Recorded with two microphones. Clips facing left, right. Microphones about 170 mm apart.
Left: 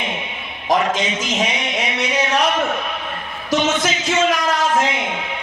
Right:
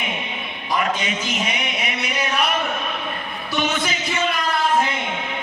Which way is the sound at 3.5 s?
90° left.